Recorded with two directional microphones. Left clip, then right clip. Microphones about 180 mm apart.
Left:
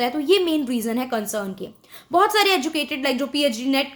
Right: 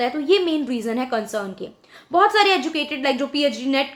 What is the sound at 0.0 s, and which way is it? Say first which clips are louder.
A woman's voice: even; 35° left (ahead or behind).